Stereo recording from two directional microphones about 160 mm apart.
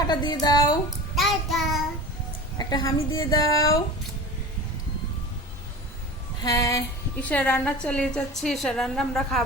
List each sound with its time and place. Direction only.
0.1 s a woman's voice: 25° left (ahead or behind)
1.1 s child singing: centre (ahead or behind)
2.6 s a woman's voice: 25° left (ahead or behind)
6.4 s a woman's voice: 25° left (ahead or behind)
7.2 s a woman's voice: 10° left (ahead or behind)